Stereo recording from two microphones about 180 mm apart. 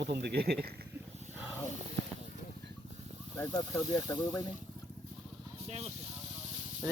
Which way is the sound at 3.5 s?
25° left (ahead or behind).